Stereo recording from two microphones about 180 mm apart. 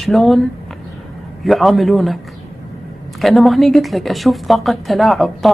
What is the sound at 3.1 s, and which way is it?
Speech, centre (ahead or behind).